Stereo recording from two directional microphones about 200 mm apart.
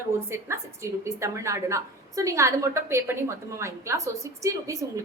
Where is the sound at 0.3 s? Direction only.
15° right (ahead or behind).